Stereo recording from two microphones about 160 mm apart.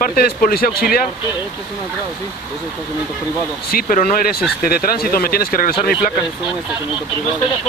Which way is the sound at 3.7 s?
60° left (ahead or behind).